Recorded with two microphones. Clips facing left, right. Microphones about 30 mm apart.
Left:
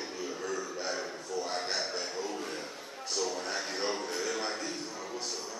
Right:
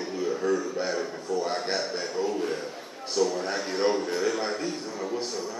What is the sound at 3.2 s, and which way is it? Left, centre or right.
A man's voice, centre.